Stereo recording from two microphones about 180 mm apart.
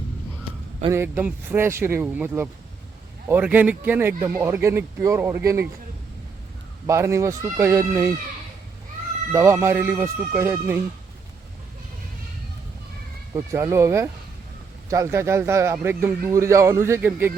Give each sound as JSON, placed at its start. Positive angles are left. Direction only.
{"t": 0.9, "sound": "speech", "side_deg": -15}
{"t": 6.8, "sound": "speech", "side_deg": -15}
{"t": 9.3, "sound": "speech", "side_deg": -15}
{"t": 13.3, "sound": "speech", "side_deg": -15}